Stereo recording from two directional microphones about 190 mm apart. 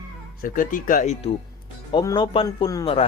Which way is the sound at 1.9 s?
25° left (ahead or behind).